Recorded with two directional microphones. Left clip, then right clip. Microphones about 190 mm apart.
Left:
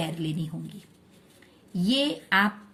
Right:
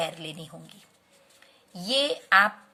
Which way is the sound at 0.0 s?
25° right (ahead or behind).